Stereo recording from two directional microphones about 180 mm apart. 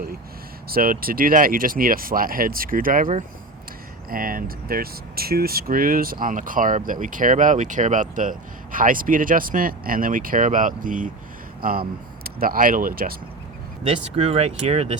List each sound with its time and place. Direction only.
0.7 s speech: 55° right (ahead or behind)
13.8 s speech: 35° right (ahead or behind)